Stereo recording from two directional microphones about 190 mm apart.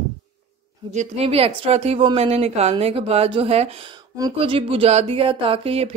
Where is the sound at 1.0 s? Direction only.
30° right (ahead or behind).